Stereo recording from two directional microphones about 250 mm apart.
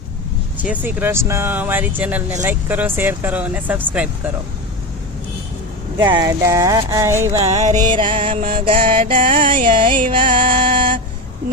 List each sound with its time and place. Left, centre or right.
0.6 s speech: centre
6.1 s speech: centre
7.4 s music: right
8.6 s music: right
9.0 s music: right
9.5 s music: centre